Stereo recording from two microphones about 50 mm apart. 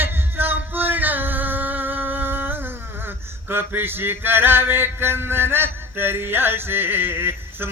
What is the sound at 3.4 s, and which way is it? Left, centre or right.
A man's voice, right.